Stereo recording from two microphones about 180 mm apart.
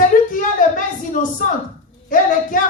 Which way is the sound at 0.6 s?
45° left (ahead or behind).